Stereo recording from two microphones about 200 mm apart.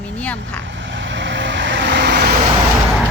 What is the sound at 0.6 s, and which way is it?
Vehicle, 65° right (ahead or behind).